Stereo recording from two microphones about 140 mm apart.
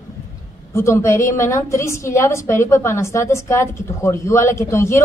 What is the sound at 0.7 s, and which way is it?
A woman's voice, 20° left (ahead or behind).